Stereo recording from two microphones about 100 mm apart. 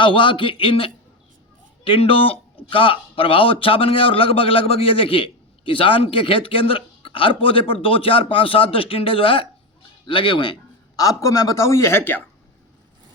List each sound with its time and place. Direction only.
0.0 s a man's voice: 55° left (ahead or behind)
10.9 s speech: 35° left (ahead or behind)